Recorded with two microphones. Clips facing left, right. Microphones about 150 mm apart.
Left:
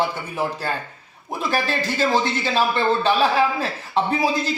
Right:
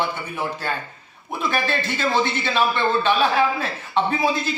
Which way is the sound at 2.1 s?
35° left (ahead or behind).